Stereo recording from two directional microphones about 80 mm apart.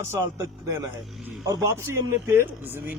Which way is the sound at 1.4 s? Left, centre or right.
Right.